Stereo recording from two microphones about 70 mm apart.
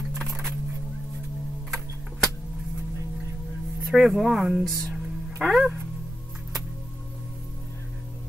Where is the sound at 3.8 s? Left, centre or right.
Centre.